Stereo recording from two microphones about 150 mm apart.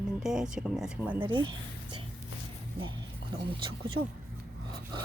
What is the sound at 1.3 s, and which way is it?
Speech, 30° right (ahead or behind).